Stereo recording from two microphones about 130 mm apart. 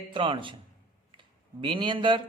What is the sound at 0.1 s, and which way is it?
Speech, 40° right (ahead or behind).